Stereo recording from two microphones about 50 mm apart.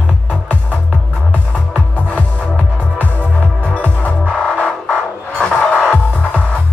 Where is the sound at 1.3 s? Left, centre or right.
Left.